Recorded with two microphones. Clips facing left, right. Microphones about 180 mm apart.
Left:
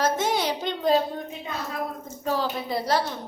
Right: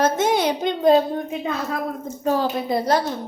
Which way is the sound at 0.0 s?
20° right (ahead or behind).